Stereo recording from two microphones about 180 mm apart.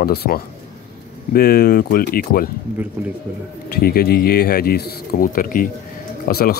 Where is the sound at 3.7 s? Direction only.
55° left (ahead or behind).